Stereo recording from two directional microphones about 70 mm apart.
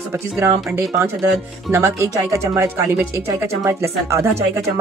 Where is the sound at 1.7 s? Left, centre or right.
Right.